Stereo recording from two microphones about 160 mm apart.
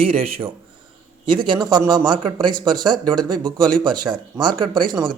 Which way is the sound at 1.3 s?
30° right (ahead or behind).